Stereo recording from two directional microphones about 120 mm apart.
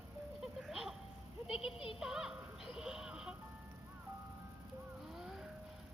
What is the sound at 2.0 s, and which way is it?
Music, 5° right (ahead or behind).